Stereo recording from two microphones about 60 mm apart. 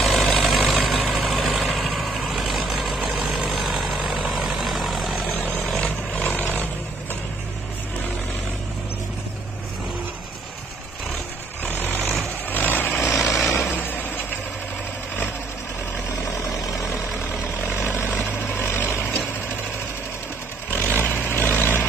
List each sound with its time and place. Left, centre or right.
0.0 s vehicle: centre
5.3 s vehicle: left
5.6 s vehicle: centre
6.1 s vehicle: left
11.6 s vehicle: left
13.0 s vehicle: centre
13.7 s vehicle: left
16.7 s vehicle: centre
17.8 s vehicle: left
20.7 s vehicle: left